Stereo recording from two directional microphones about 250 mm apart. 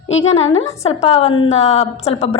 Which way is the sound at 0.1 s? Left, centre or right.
Left.